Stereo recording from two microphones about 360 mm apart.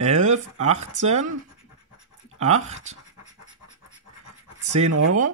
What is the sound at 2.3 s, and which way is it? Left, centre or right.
Speech, centre.